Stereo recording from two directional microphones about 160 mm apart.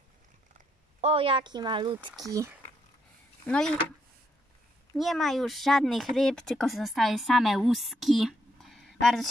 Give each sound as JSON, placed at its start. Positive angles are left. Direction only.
{"t": 1.0, "sound": "speech", "side_deg": -35}
{"t": 3.4, "sound": "speech", "side_deg": 5}
{"t": 4.9, "sound": "speech", "side_deg": 0}